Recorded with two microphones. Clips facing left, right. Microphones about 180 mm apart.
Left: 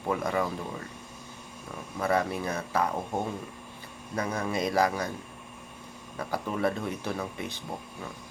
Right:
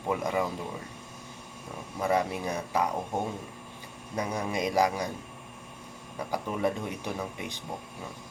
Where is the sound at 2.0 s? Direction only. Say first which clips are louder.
Even; 15° right (ahead or behind).